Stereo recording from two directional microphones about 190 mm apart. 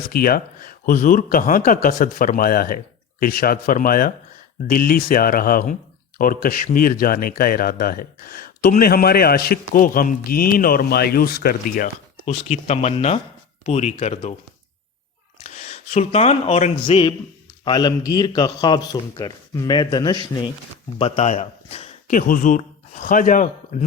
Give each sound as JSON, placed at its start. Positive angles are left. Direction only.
{"t": 0.1, "sound": "speech", "side_deg": 50}
{"t": 12.2, "sound": "speech", "side_deg": 35}
{"t": 15.4, "sound": "a man's voice", "side_deg": 35}
{"t": 21.0, "sound": "a man's voice", "side_deg": 35}